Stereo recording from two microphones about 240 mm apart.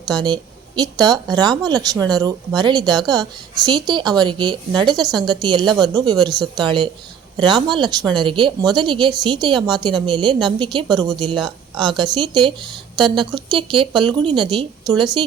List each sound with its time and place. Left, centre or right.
0.1 s a woman's voice: centre